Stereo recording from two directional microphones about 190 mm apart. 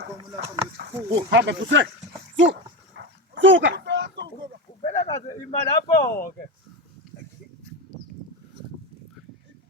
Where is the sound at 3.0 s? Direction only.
80° right.